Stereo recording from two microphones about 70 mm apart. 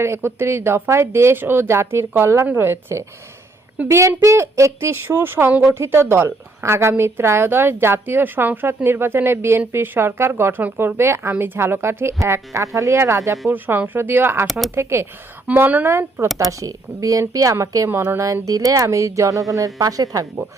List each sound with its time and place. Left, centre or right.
0.0 s a woman's voice: right
13.5 s a woman's voice: right
15.4 s a woman's voice: right
16.4 s a woman's voice: right
17.8 s a woman's voice: right
18.4 s a woman's voice: right